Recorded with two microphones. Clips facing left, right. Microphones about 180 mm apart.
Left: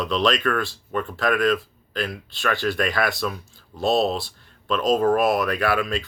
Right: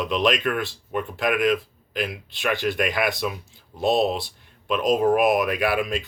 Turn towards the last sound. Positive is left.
turn(degrees=-15)  # may be behind; listen again after turning